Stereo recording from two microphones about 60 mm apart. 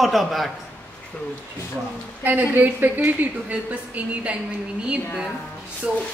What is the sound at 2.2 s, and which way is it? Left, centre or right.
A woman's voice, right.